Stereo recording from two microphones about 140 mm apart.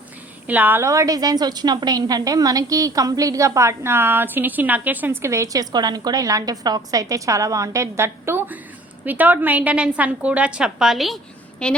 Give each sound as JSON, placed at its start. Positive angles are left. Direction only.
{"t": 0.4, "sound": "a woman's voice", "side_deg": -10}